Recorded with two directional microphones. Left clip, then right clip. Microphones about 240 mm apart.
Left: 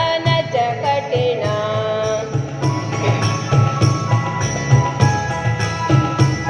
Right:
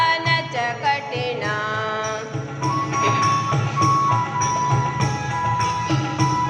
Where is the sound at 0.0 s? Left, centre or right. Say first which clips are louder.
Left 1 dB; centre.